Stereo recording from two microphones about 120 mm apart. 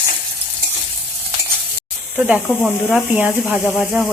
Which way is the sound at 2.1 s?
10° right (ahead or behind).